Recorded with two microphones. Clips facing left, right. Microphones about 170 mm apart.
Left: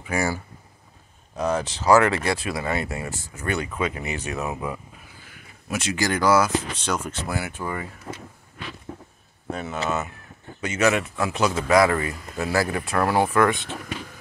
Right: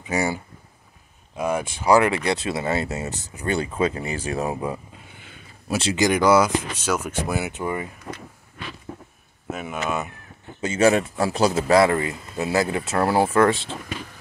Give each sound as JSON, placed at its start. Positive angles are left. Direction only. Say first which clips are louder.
{"t": 0.0, "sound": "speech", "louder": "right 1 dB", "side_deg": -20}
{"t": 1.3, "sound": "speech", "louder": "even", "side_deg": -10}
{"t": 6.0, "sound": "speech", "louder": "right 3 dB", "side_deg": -20}
{"t": 9.5, "sound": "speech", "louder": "even", "side_deg": -10}
{"t": 10.6, "sound": "speech", "louder": "right 3 dB", "side_deg": -30}